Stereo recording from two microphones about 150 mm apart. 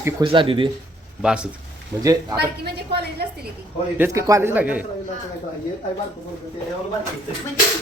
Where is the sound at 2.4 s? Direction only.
90° right.